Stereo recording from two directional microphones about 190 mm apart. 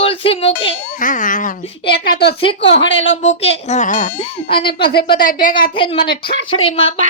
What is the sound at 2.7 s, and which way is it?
Speech, 70° left (ahead or behind).